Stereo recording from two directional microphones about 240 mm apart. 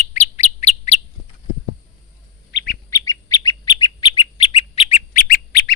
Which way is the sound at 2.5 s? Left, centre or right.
Left.